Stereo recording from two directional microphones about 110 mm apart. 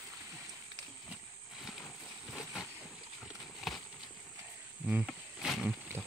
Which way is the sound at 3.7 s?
Centre (ahead or behind).